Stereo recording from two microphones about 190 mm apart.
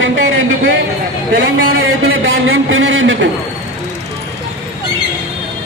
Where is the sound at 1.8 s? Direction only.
90° right.